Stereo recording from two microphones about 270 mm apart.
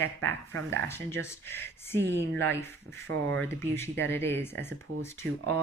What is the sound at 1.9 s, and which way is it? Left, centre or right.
Speech, right.